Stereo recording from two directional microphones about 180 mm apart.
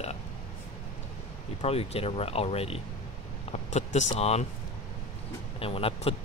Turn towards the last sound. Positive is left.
turn(degrees=30)  # may be behind; listen again after turning